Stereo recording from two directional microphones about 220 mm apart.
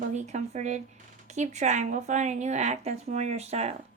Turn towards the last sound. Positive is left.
turn(degrees=-30)  # may be behind; listen again after turning